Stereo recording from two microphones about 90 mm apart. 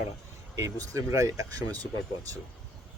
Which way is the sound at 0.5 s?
35° right (ahead or behind).